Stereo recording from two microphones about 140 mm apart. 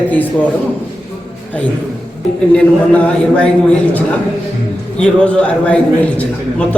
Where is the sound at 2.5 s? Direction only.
10° left (ahead or behind).